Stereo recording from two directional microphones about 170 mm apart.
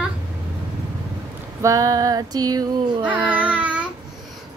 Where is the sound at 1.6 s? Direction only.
20° right (ahead or behind).